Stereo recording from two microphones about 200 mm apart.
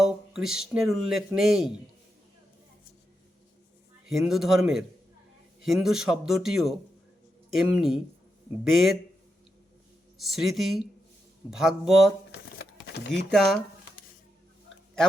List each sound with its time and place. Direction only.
0.0 s a sound: centre (ahead or behind)
0.7 s a man's voice: centre (ahead or behind)
4.1 s a man's voice: centre (ahead or behind)
10.2 s a man's voice: centre (ahead or behind)
12.3 s crumpling: 50° left (ahead or behind)
13.1 s a man's voice: centre (ahead or behind)